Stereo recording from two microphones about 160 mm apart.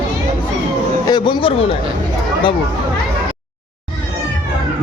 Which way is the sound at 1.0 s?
25° left (ahead or behind).